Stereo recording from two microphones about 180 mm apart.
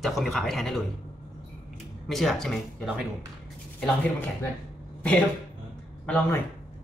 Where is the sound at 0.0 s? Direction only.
Centre (ahead or behind).